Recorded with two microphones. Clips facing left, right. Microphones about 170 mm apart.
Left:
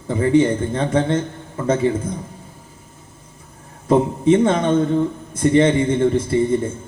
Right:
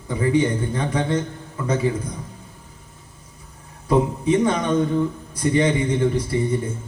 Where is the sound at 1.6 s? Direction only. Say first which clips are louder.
Left 4 dB; 25° left (ahead or behind).